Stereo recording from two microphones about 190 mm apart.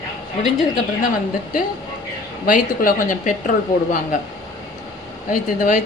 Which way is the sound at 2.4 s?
45° left (ahead or behind).